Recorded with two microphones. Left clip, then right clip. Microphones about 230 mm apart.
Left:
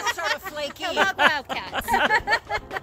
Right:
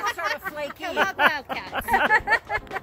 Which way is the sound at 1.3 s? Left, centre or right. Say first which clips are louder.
Left 2 dB; centre.